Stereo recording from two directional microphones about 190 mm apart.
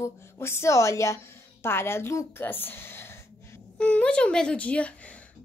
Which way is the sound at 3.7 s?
5° left (ahead or behind).